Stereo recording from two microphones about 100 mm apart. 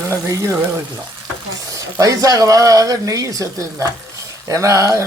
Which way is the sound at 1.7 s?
35° right (ahead or behind).